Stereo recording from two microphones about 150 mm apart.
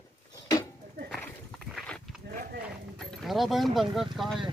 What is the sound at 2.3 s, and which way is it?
Clip-clop, 70° right (ahead or behind).